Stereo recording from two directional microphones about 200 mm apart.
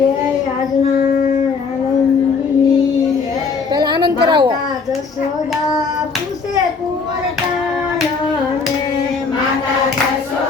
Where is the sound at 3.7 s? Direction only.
20° right (ahead or behind).